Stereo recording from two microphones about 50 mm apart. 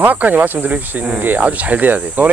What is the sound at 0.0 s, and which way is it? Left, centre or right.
Cricket, right.